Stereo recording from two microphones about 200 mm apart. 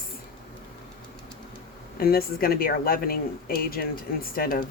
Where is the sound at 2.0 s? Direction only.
50° left (ahead or behind).